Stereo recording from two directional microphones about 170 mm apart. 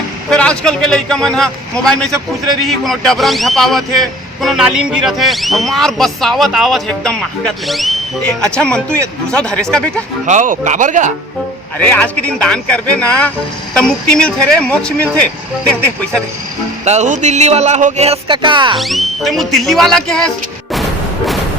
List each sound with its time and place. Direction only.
0.3 s a man's voice: 5° left (ahead or behind)
10.2 s speech: 50° right (ahead or behind)
11.8 s a man's voice: 10° left (ahead or behind)
16.8 s speech: 40° right (ahead or behind)
18.8 s a man's voice: centre (ahead or behind)